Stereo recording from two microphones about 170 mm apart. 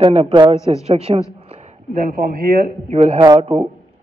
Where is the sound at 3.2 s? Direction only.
25° right (ahead or behind).